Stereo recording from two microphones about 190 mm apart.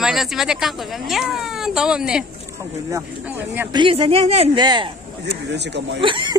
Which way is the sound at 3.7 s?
25° right (ahead or behind).